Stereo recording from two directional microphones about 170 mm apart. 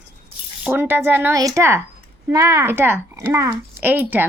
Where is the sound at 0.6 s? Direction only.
10° right (ahead or behind).